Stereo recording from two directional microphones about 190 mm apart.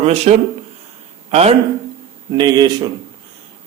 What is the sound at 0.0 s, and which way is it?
Speech, 35° right (ahead or behind).